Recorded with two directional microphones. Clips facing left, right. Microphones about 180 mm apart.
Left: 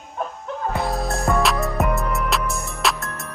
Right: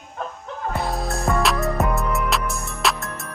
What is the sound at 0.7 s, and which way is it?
Music, centre (ahead or behind).